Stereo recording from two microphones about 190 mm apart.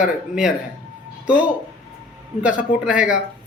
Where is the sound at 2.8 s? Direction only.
5° right (ahead or behind).